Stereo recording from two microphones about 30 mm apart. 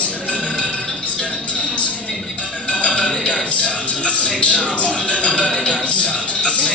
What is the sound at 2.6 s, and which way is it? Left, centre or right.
Music, left.